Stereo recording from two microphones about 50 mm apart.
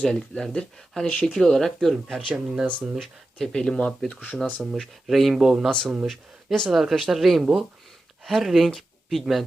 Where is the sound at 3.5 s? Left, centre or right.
Centre.